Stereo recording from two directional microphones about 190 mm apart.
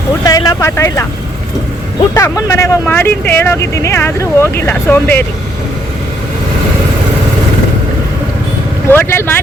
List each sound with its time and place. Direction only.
0.3 s speech: 20° left (ahead or behind)
2.1 s speech: 15° left (ahead or behind)
8.9 s speech: 10° left (ahead or behind)